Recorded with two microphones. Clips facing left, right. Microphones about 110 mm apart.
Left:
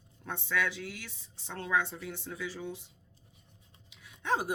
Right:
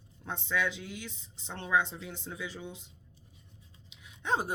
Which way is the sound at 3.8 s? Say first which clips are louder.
Left 1 dB; 20° right (ahead or behind).